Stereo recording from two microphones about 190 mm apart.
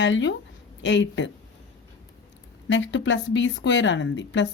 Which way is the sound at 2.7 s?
70° left (ahead or behind).